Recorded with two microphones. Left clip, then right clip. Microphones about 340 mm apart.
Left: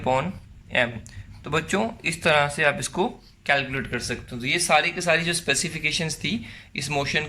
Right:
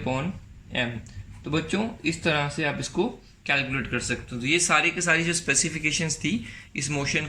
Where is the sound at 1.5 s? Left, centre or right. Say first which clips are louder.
Left 3 dB; left.